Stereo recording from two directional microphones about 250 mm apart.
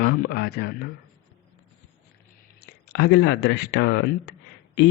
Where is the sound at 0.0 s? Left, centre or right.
Left.